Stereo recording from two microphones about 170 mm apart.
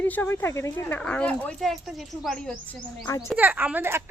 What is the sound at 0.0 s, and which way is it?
Speech, 10° left (ahead or behind).